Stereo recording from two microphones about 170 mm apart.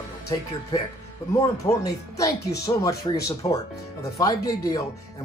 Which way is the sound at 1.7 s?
20° left (ahead or behind).